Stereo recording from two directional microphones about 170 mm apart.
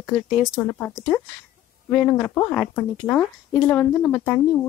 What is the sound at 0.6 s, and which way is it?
Speech, 10° left (ahead or behind).